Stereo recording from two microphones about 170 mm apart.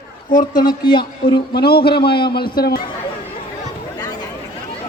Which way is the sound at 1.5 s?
65° left (ahead or behind).